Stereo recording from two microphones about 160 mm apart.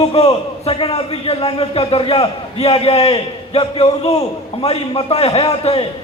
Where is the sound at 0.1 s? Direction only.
40° left (ahead or behind).